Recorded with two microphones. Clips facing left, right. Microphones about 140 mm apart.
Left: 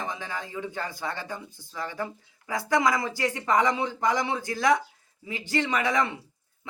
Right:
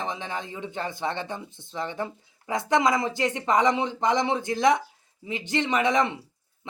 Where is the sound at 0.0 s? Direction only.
20° right (ahead or behind).